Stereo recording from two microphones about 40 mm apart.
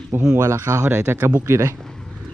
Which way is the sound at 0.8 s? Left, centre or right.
Right.